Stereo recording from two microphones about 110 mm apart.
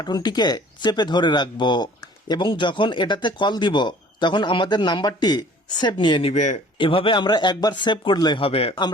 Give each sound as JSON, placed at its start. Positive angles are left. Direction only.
{"t": 0.0, "sound": "speech", "side_deg": 40}
{"t": 6.3, "sound": "speech", "side_deg": 90}
{"t": 6.7, "sound": "speech", "side_deg": 50}